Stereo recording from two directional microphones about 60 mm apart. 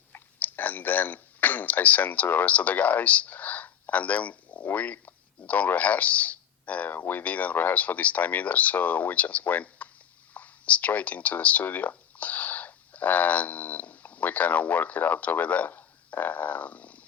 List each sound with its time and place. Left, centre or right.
0.1 s speech: left